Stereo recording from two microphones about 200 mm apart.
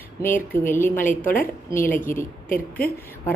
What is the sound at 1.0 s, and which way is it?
Speech, 45° left (ahead or behind).